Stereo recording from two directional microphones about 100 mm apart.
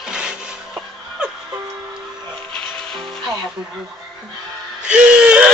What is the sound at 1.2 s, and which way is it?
Music, 10° right (ahead or behind).